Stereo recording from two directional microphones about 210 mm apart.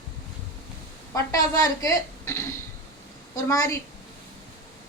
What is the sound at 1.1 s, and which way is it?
A woman's voice, 15° left (ahead or behind).